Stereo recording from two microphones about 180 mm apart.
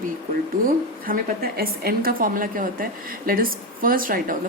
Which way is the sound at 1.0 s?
55° right (ahead or behind).